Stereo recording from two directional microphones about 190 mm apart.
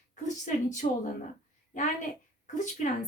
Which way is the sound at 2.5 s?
40° left (ahead or behind).